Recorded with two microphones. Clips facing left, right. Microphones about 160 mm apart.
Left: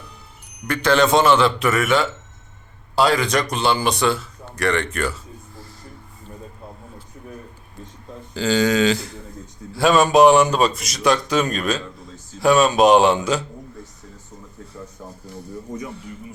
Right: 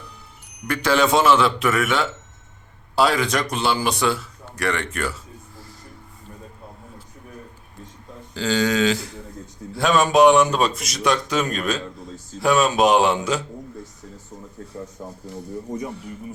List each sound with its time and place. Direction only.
0.7 s a man's voice: 5° right (ahead or behind)
8.4 s a man's voice: 5° left (ahead or behind)
15.7 s speech: 35° right (ahead or behind)